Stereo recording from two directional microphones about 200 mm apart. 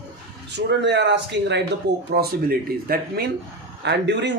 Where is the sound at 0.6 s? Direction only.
60° right (ahead or behind).